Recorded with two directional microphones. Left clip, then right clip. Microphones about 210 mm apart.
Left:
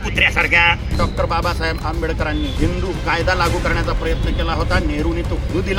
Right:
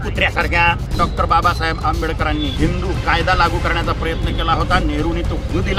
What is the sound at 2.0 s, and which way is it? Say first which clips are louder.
Speech: right 2 dB; 20° right (ahead or behind).